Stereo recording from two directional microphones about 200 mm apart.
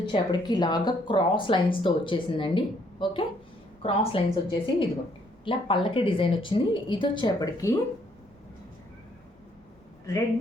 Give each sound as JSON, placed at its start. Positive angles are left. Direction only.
{"t": 0.1, "sound": "speech", "side_deg": 20}